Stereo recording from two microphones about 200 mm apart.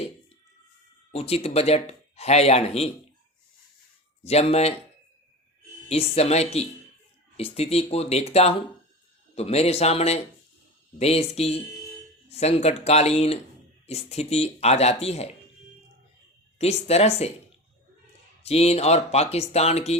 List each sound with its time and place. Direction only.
1.1 s speech: 30° left (ahead or behind)
4.2 s speech: 30° left (ahead or behind)
5.9 s speech: 30° left (ahead or behind)
16.6 s speech: 30° left (ahead or behind)
18.4 s speech: 30° left (ahead or behind)